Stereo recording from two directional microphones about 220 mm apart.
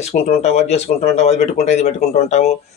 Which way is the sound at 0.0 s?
30° left (ahead or behind).